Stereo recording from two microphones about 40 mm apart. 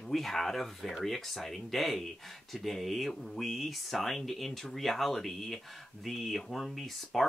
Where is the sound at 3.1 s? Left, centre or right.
Centre.